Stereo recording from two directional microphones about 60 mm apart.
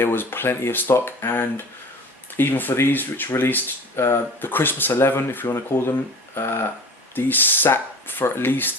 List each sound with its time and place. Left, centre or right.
0.0 s speech: left